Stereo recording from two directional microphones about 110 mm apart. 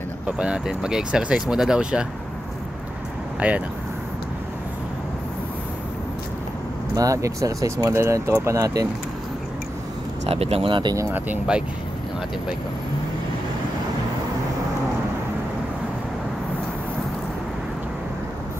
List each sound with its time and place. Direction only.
0.4 s speech: 10° right (ahead or behind)
3.3 s speech: 15° right (ahead or behind)
7.0 s speech: 30° right (ahead or behind)
10.2 s speech: 65° right (ahead or behind)
10.7 s speech: 45° right (ahead or behind)
11.1 s speech: 10° right (ahead or behind)